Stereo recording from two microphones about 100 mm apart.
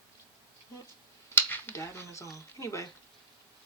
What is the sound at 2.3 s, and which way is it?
Speech, 30° left (ahead or behind).